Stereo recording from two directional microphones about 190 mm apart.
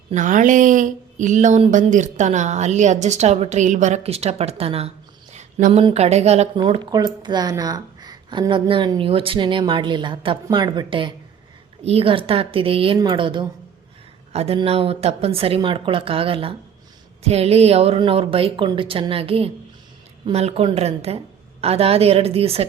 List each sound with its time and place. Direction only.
0.1 s speech: 40° right (ahead or behind)
5.3 s a sound: 40° right (ahead or behind)
5.8 s speech: 35° right (ahead or behind)
6.6 s speech: 20° right (ahead or behind)